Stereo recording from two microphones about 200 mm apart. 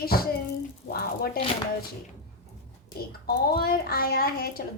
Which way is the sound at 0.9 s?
50° left (ahead or behind).